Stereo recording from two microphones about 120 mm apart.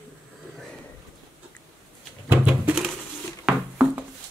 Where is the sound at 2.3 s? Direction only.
10° right (ahead or behind).